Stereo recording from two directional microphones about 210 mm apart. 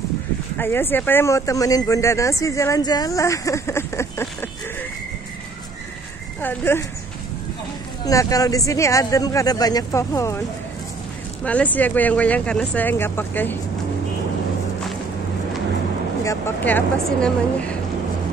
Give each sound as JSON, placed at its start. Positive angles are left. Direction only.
{"t": 0.6, "sound": "speech", "side_deg": 10}
{"t": 6.4, "sound": "speech", "side_deg": 10}
{"t": 8.0, "sound": "speech", "side_deg": 15}
{"t": 11.4, "sound": "speech", "side_deg": 5}
{"t": 16.3, "sound": "speech", "side_deg": 10}